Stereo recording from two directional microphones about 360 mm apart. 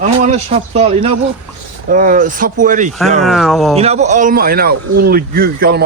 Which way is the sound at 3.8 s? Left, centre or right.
Centre.